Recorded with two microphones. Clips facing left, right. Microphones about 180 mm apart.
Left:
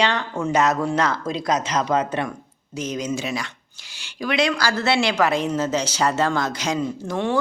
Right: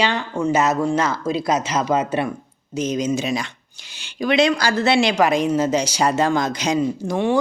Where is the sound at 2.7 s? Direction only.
20° right (ahead or behind).